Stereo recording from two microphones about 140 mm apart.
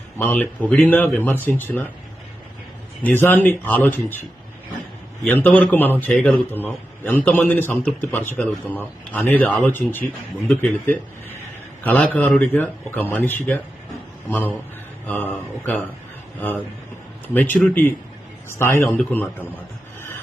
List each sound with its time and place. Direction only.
0.2 s a man's voice: 10° left (ahead or behind)
3.0 s a man's voice: 15° left (ahead or behind)
5.2 s a man's voice: 15° left (ahead or behind)
15.0 s a man's voice: 10° left (ahead or behind)
17.3 s a man's voice: 10° left (ahead or behind)